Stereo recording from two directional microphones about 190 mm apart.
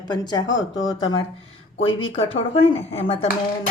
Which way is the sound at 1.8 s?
90° left.